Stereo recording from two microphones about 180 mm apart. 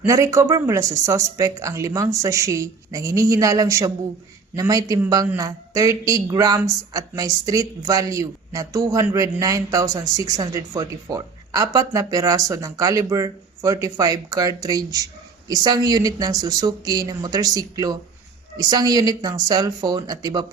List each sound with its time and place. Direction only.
0.0 s a man's voice: 15° right (ahead or behind)